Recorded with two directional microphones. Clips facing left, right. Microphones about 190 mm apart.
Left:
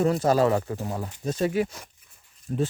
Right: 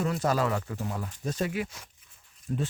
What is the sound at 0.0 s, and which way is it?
Speech, 35° left (ahead or behind).